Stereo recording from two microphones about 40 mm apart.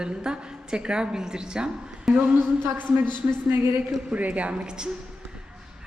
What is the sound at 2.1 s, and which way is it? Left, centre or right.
Speech, centre.